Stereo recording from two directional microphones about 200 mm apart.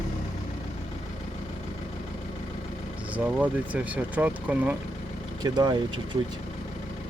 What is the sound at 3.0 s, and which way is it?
Speech, 5° right (ahead or behind).